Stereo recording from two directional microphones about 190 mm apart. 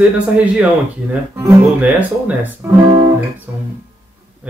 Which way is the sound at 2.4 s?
10° right (ahead or behind).